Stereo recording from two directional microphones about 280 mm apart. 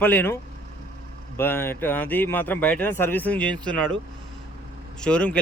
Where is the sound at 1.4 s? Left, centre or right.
Centre.